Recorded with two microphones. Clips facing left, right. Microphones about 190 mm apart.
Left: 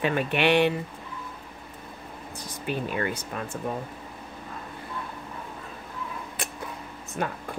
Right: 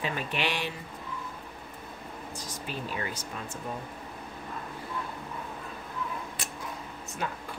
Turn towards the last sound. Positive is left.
turn(degrees=55)  # may be behind; listen again after turning